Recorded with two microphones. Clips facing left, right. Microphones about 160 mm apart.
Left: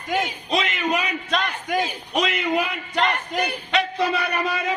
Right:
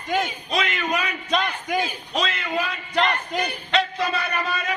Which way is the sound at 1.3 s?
Centre (ahead or behind).